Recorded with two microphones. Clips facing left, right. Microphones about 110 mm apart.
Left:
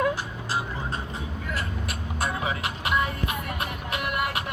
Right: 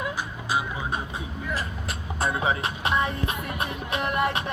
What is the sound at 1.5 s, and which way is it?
Music, 30° right (ahead or behind).